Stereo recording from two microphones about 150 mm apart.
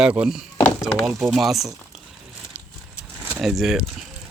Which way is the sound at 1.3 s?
Centre (ahead or behind).